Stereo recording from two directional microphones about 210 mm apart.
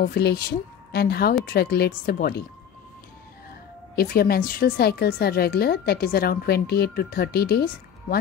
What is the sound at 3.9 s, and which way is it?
Speech, 45° left (ahead or behind).